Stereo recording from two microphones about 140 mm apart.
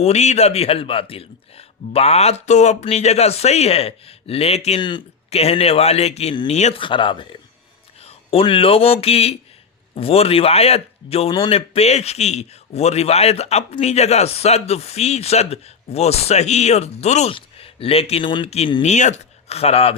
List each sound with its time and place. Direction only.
0.0 s a man's voice: 50° left (ahead or behind)
6.7 s a man's voice: 35° left (ahead or behind)
18.8 s a man's voice: 55° left (ahead or behind)